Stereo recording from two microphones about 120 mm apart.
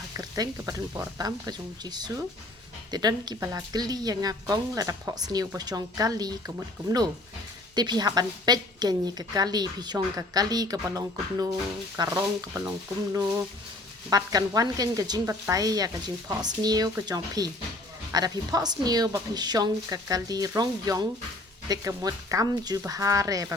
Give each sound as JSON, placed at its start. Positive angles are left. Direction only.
{"t": 0.2, "sound": "a woman's voice", "side_deg": -30}
{"t": 7.8, "sound": "a woman's voice", "side_deg": -35}